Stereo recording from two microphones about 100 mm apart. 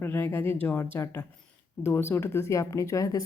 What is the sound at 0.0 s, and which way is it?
A woman's voice, 25° left (ahead or behind).